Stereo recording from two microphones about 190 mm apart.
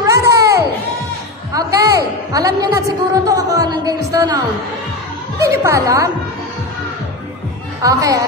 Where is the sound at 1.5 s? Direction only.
15° right (ahead or behind).